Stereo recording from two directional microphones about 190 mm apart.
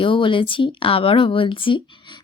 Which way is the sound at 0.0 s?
25° left (ahead or behind).